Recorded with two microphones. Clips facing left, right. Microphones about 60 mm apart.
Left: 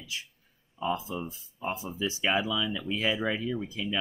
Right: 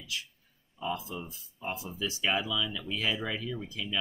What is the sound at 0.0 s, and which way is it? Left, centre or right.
Speech, left.